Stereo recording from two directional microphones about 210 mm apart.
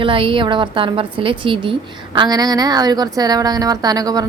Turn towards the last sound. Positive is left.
turn(degrees=-15)  # may be behind; listen again after turning